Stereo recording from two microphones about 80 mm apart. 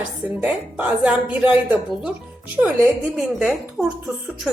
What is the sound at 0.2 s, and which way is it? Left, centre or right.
Music, right.